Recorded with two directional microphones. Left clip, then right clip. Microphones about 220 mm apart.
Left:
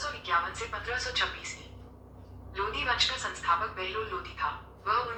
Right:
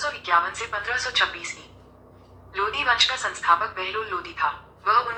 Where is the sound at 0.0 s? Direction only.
45° right (ahead or behind).